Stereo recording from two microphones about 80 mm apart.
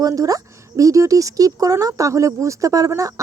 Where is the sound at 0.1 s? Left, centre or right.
Right.